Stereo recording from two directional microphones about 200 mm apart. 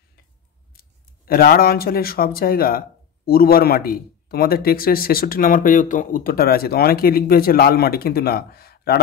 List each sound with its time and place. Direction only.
0.7 s speech: 45° left (ahead or behind)